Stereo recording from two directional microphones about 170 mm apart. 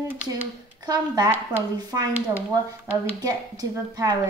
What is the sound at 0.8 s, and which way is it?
A woman's voice, 20° right (ahead or behind).